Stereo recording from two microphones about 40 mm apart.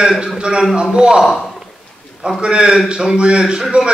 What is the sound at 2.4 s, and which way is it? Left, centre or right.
Speech, right.